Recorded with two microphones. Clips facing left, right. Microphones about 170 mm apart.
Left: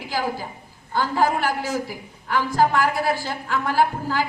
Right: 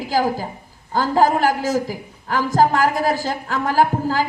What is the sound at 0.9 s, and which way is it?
A woman's voice, 40° right (ahead or behind).